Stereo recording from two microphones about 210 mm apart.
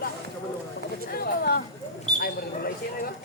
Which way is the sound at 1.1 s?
45° left (ahead or behind).